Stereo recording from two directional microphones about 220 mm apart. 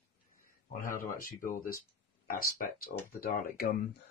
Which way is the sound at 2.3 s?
40° left (ahead or behind).